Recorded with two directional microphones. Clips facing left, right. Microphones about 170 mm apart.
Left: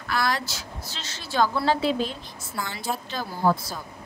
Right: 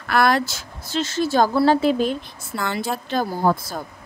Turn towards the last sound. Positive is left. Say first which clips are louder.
# right 3 dB
turn(degrees=-50)  # may be behind; listen again after turning